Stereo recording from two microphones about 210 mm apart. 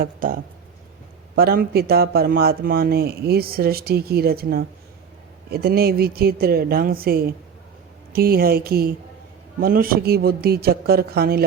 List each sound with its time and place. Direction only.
0.0 s speech: 40° right (ahead or behind)
1.4 s speech: 45° right (ahead or behind)